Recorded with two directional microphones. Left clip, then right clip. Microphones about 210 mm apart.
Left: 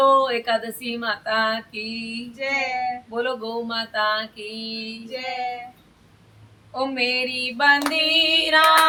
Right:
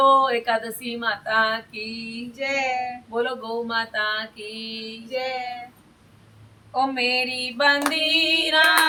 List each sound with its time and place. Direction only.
0.1 s speech: centre (ahead or behind)
2.4 s child singing: 15° right (ahead or behind)
3.2 s speech: centre (ahead or behind)
5.1 s child singing: 15° right (ahead or behind)
6.7 s speech: centre (ahead or behind)